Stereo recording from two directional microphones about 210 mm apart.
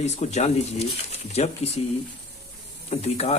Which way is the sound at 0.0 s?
35° left (ahead or behind).